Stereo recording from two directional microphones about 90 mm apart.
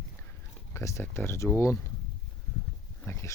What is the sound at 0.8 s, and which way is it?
Speech, 30° left (ahead or behind).